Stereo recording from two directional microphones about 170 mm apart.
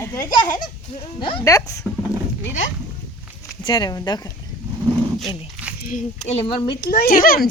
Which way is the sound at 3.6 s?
25° left (ahead or behind).